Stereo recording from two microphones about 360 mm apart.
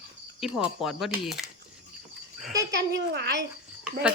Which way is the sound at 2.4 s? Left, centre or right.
Centre.